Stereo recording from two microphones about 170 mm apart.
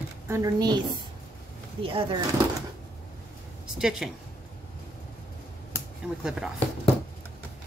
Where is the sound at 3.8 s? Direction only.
5° right (ahead or behind).